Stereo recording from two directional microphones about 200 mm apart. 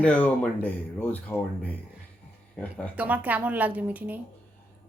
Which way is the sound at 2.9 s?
5° right (ahead or behind).